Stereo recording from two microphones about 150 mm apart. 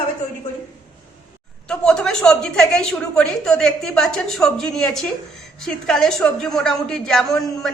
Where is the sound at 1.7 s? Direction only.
5° left (ahead or behind).